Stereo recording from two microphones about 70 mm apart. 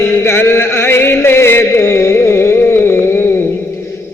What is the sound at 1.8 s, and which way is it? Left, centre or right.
Carnatic music, left.